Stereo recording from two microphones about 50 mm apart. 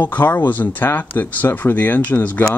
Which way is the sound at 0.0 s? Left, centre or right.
Left.